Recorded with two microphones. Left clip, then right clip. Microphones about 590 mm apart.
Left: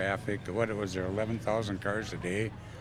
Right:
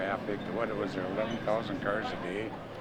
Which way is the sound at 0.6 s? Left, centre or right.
Left.